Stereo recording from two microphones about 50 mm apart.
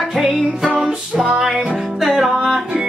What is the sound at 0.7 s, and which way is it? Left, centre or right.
Music, centre.